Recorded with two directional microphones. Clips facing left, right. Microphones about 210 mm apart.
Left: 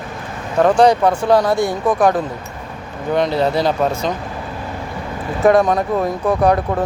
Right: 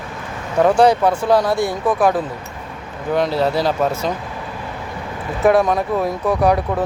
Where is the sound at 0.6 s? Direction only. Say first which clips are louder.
Left 1 dB; 5° right (ahead or behind).